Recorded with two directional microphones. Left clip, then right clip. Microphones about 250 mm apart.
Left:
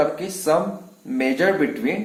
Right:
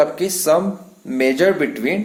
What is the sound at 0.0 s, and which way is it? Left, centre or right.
Speech, right.